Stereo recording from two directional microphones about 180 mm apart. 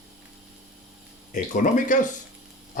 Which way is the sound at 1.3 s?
45° left (ahead or behind).